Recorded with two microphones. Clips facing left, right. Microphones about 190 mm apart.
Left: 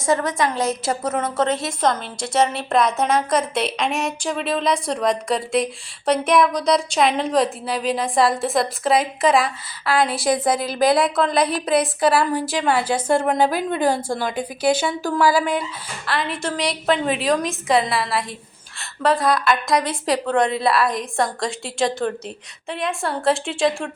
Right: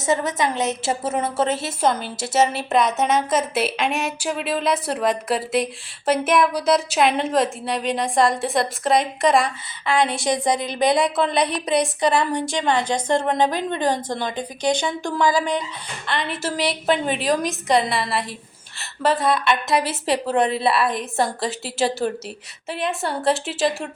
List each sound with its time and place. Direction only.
0.0 s a woman's voice: 20° right (ahead or behind)
1.4 s a woman's voice: 5° right (ahead or behind)